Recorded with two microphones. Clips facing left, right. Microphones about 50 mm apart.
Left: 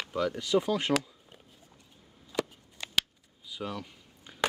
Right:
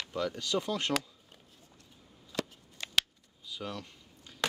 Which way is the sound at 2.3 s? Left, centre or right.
Centre.